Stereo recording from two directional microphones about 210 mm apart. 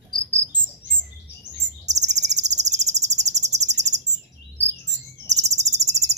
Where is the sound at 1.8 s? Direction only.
35° right (ahead or behind).